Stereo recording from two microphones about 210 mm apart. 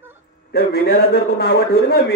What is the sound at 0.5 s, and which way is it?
A man's voice, 50° left (ahead or behind).